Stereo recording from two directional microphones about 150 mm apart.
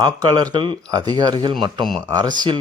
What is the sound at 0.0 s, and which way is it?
Speech, 25° right (ahead or behind).